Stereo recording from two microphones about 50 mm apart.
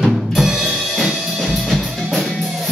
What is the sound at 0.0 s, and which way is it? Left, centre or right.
Drum, centre.